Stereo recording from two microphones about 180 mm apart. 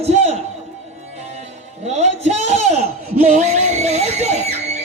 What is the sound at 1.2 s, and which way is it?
Music, 35° right (ahead or behind).